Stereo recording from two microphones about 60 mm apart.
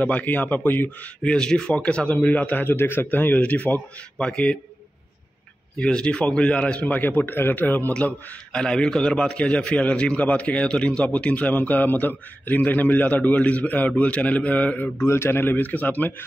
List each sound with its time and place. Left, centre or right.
0.0 s a man's voice: left
1.2 s a man's voice: centre
4.2 s speech: centre
5.8 s a man's voice: centre
8.5 s a man's voice: centre; by 14.9 s left
15.0 s a man's voice: left